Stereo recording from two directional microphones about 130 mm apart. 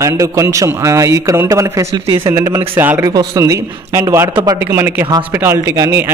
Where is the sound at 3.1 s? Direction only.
30° right (ahead or behind).